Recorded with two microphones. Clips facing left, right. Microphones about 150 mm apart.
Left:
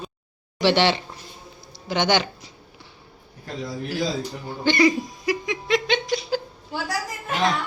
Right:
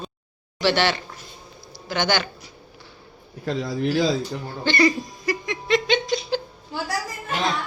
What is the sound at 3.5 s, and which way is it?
Speech, 90° right.